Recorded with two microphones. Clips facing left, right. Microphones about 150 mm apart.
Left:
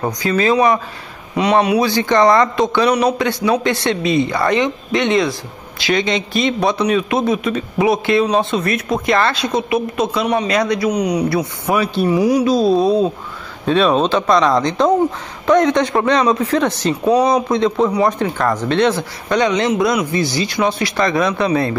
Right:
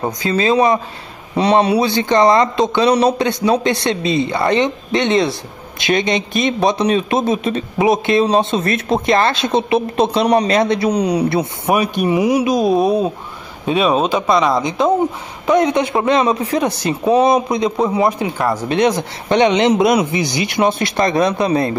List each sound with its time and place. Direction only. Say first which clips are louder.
0.0 s a man's voice: even; 25° right (ahead or behind)
10.6 s a man's voice: right 1 dB; 25° right (ahead or behind)
17.1 s a man's voice: right 2 dB; 25° right (ahead or behind)
17.5 s a man's voice: left 1 dB; 15° right (ahead or behind)